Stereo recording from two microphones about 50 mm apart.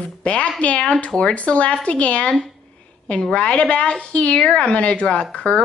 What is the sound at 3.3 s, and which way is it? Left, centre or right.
A woman's voice, centre.